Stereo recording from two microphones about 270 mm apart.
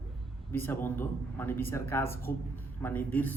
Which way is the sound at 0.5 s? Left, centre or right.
Centre.